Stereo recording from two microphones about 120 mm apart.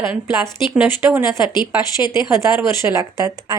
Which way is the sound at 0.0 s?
20° right (ahead or behind).